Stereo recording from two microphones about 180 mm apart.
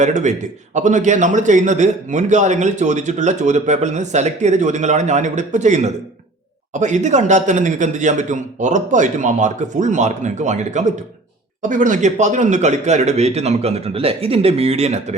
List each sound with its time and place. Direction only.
0.0 s a man's voice: 40° right (ahead or behind)